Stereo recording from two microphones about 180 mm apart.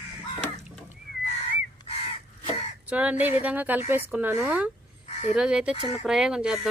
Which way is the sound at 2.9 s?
5° right (ahead or behind).